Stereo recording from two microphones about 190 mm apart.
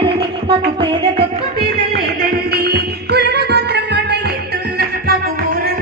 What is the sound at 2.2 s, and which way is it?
Music, 55° right (ahead or behind).